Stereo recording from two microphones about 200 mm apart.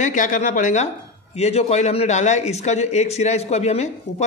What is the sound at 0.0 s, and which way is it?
A man's voice, 40° left (ahead or behind).